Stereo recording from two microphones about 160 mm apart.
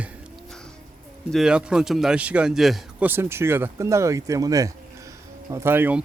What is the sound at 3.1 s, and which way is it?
Speech, 15° right (ahead or behind).